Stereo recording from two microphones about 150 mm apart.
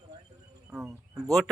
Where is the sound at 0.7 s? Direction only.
20° right (ahead or behind).